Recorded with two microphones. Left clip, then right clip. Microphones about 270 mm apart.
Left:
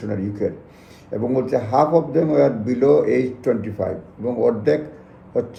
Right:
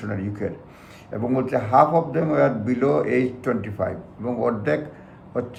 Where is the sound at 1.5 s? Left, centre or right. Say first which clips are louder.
Even; centre.